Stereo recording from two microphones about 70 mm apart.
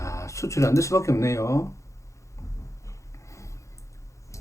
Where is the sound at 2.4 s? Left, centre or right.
Left.